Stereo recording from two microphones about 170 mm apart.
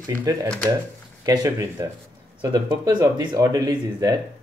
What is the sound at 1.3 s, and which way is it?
Speech, 20° right (ahead or behind).